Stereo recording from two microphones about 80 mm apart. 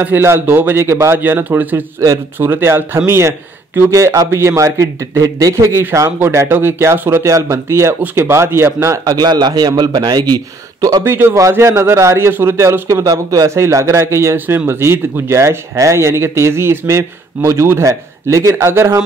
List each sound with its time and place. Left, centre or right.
0.0 s a man's voice: right
2.0 s a man's voice: right
2.4 s a man's voice: right
11.1 s a man's voice: right
13.0 s a man's voice: right